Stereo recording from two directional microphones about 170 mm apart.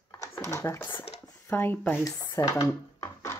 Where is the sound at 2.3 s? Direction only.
20° left (ahead or behind).